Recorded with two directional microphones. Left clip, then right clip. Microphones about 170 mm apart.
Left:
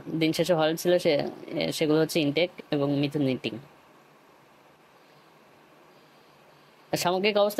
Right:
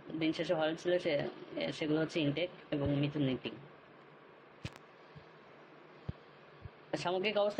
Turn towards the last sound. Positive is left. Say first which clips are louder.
# left 9 dB
turn(degrees=45)  # may be behind; listen again after turning